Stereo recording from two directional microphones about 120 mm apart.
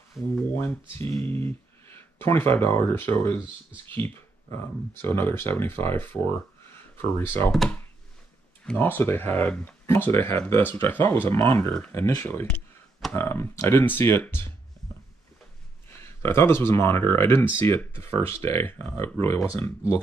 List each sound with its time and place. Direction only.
0.4 s speech: 20° left (ahead or behind)
8.7 s speech: 20° left (ahead or behind)
15.9 s speech: 20° left (ahead or behind)